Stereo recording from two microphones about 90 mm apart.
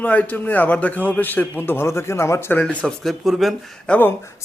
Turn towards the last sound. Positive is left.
turn(degrees=20)  # may be behind; listen again after turning